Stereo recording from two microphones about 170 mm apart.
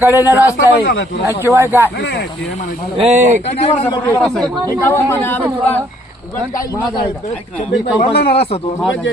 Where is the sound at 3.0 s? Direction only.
40° right (ahead or behind).